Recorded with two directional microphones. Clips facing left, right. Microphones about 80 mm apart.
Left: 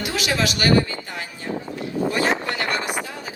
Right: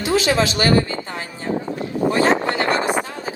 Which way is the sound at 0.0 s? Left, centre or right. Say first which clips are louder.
Right 6 dB; right.